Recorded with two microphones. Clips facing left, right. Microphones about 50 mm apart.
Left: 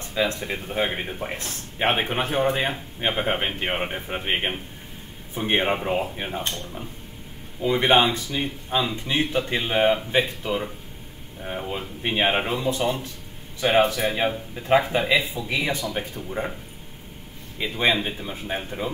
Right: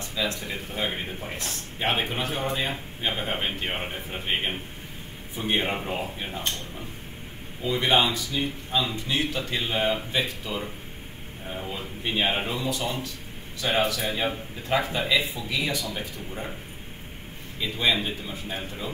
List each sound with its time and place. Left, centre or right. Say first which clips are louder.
0.1 s speech: left 5 dB; left
7.6 s speech: left 4 dB; left
11.7 s speech: left 2 dB; left
17.6 s a man's voice: left 3 dB; left